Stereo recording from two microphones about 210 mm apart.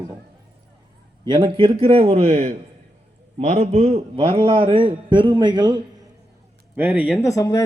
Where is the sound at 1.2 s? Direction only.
25° right (ahead or behind).